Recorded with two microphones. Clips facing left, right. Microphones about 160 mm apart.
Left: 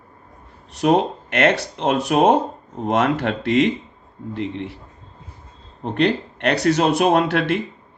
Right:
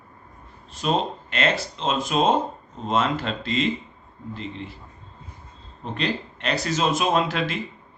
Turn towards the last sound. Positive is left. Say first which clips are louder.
# left 5 dB
turn(degrees=65)  # may be behind; listen again after turning